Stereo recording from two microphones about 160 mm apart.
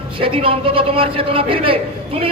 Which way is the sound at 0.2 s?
35° right (ahead or behind).